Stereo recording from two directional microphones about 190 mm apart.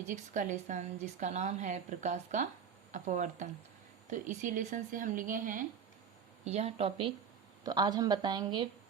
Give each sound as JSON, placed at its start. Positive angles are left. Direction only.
{"t": 0.1, "sound": "a woman's voice", "side_deg": -40}
{"t": 6.4, "sound": "a woman's voice", "side_deg": -35}